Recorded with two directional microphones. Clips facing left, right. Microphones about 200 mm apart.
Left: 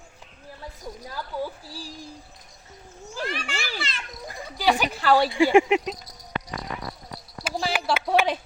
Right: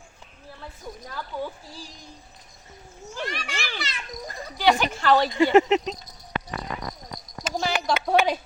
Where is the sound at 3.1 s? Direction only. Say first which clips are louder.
Left 1 dB; 5° left (ahead or behind).